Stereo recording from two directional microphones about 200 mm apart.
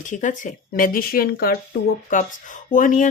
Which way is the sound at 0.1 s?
40° left (ahead or behind).